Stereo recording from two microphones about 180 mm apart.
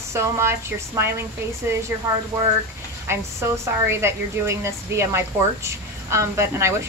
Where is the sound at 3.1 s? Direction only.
15° right (ahead or behind).